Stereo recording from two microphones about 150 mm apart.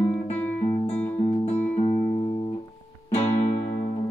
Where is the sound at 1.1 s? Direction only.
45° left (ahead or behind).